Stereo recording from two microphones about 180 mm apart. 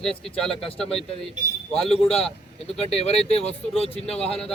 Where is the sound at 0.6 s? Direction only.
35° left (ahead or behind).